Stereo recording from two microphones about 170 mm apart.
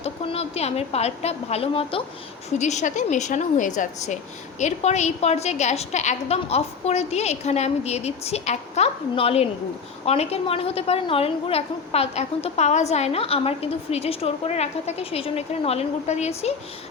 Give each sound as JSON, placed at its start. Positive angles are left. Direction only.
{"t": 0.0, "sound": "a woman's voice", "side_deg": 35}